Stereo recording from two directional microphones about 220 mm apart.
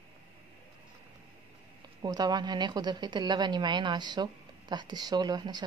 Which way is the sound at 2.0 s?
20° right (ahead or behind).